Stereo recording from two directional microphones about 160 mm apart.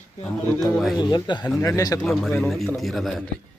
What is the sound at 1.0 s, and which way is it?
Speech, 25° left (ahead or behind).